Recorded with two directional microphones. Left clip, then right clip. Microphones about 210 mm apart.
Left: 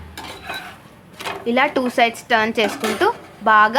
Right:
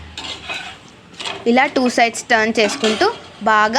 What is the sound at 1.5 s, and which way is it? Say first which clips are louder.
A woman's voice: right 3 dB; 20° right (ahead or behind).